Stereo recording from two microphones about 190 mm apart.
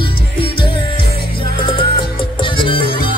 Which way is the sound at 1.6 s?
25° left (ahead or behind).